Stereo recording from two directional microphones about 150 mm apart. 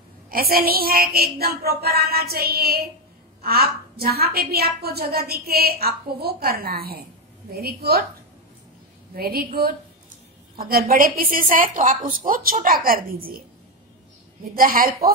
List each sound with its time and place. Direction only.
0.3 s a woman's voice: 80° right
9.1 s a woman's voice: 90° right
14.4 s a woman's voice: 75° right (ahead or behind)